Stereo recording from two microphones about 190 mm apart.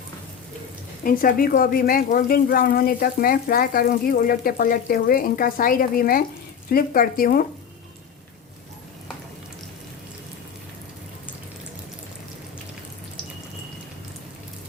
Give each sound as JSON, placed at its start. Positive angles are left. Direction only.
{"t": 1.0, "sound": "speech", "side_deg": 50}